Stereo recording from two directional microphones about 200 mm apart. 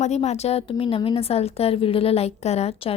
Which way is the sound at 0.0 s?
35° left (ahead or behind).